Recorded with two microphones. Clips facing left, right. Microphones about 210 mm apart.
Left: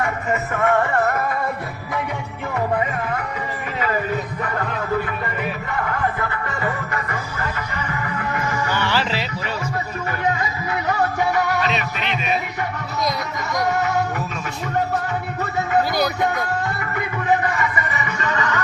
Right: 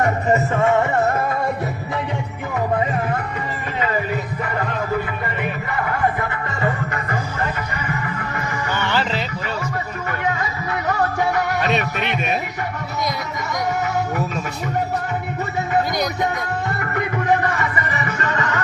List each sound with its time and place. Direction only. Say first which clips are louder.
0.0 s music: right 5 dB; 35° right (ahead or behind)
6.1 s music: right 1 dB; 25° right (ahead or behind)
8.9 s a sound: right 1 dB; 5° left (ahead or behind)
11.7 s music: right 3 dB; 50° right (ahead or behind)
17.6 s music: even; 35° right (ahead or behind)